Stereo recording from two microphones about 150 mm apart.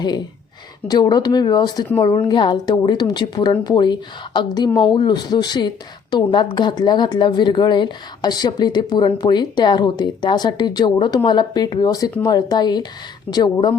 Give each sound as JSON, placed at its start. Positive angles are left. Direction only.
{"t": 0.9, "sound": "speech", "side_deg": 30}